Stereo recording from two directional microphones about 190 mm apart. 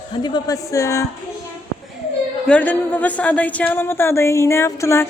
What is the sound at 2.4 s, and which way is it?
A woman's voice, 5° left (ahead or behind).